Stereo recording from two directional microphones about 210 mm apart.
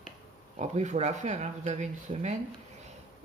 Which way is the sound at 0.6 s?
30° right (ahead or behind).